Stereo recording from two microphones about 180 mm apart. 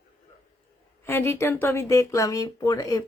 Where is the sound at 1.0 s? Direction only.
10° left (ahead or behind).